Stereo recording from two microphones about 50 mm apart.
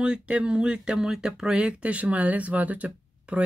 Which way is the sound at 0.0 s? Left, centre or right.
Centre.